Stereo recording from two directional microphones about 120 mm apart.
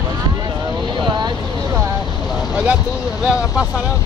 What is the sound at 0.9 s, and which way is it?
Vehicle, 40° right (ahead or behind).